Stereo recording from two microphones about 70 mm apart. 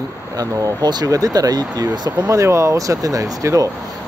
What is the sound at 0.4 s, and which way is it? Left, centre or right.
Speech, right.